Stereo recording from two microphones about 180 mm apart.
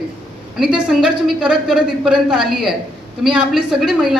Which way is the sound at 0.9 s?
5° right (ahead or behind).